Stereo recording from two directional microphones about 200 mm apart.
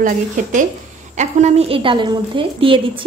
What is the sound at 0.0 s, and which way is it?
A woman's voice, 40° right (ahead or behind).